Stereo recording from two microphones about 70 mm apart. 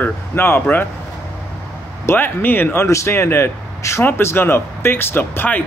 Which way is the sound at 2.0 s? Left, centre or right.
Left.